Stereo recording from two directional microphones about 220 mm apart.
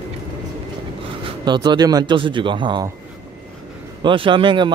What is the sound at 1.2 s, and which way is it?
A man's voice, 20° right (ahead or behind).